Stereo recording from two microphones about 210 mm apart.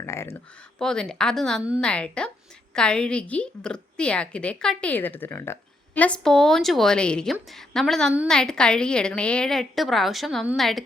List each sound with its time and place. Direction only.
0.0 s a woman's voice: 15° left (ahead or behind)